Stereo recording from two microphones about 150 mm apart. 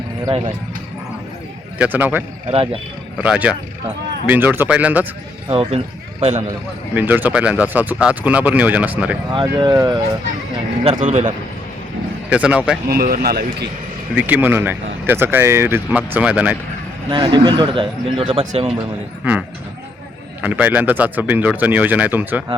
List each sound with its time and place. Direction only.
0.3 s speech: 40° right (ahead or behind)
1.8 s a man's voice: 10° right (ahead or behind)
3.2 s a man's voice: 10° right (ahead or behind)
5.5 s speech: 40° right (ahead or behind)
6.9 s a man's voice: 10° right (ahead or behind)
9.3 s speech: 30° right (ahead or behind)
11.0 s a man's voice: 55° right (ahead or behind)
12.3 s a man's voice: 10° right (ahead or behind)
12.9 s a man's voice: 90° right
14.2 s a man's voice: 10° right (ahead or behind)
17.1 s speech: 30° right (ahead or behind)
19.2 s a man's voice: 10° right (ahead or behind)